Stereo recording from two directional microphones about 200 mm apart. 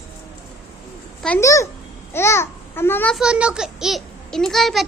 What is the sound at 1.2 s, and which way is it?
A woman's voice, 10° left (ahead or behind).